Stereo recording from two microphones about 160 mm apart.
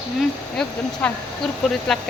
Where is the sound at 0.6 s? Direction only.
5° left (ahead or behind).